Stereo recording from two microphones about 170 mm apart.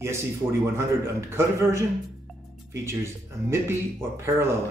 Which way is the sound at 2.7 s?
15° right (ahead or behind).